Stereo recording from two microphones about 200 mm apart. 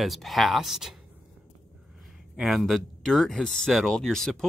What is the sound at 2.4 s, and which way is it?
Speech, centre (ahead or behind).